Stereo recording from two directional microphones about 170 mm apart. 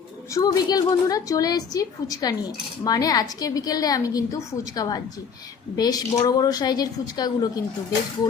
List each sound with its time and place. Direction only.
0.3 s a woman's voice: 25° left (ahead or behind)